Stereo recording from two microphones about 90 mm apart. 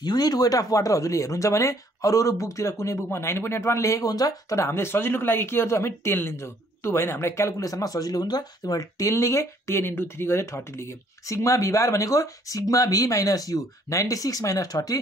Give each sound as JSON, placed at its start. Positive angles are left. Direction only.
{"t": 0.0, "sound": "speech", "side_deg": 50}
{"t": 4.6, "sound": "speech", "side_deg": 25}